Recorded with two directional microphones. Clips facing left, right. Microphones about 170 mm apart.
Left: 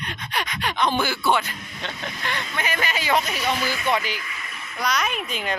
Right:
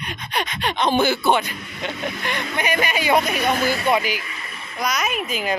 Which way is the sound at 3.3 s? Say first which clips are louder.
Right 5 dB; 55° right (ahead or behind).